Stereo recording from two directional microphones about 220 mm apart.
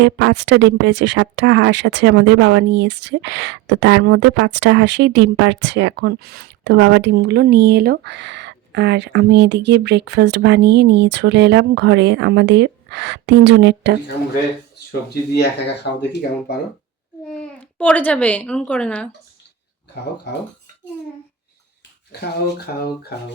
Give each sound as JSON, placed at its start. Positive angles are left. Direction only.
{"t": 0.0, "sound": "speech", "side_deg": -55}
{"t": 15.3, "sound": "speech", "side_deg": 50}
{"t": 17.2, "sound": "speech", "side_deg": 5}
{"t": 22.1, "sound": "speech", "side_deg": 45}